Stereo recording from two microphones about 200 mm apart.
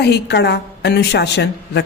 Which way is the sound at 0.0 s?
55° left (ahead or behind).